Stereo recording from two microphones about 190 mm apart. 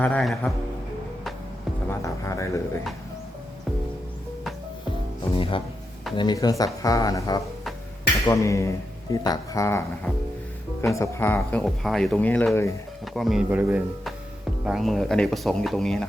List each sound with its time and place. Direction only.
0.0 s speech: 5° left (ahead or behind)
1.9 s speech: 15° left (ahead or behind)
5.3 s speech: 25° left (ahead or behind); by 12.7 s 10° left (ahead or behind)
13.1 s speech: centre (ahead or behind)